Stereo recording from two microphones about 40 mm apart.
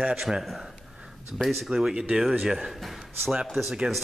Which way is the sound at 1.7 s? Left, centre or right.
Centre.